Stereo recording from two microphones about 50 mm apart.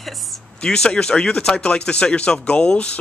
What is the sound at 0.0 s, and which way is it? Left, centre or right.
Speech, centre.